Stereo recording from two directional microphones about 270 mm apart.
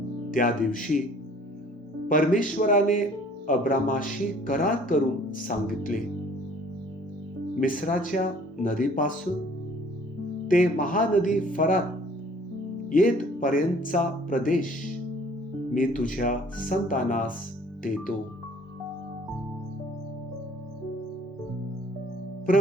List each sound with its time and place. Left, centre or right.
0.3 s speech: left
2.0 s speech: left
7.6 s speech: left
10.5 s speech: left
12.9 s speech: left
15.7 s speech: left